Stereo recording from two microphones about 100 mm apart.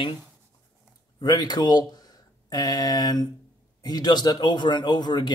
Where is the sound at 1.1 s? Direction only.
45° left (ahead or behind).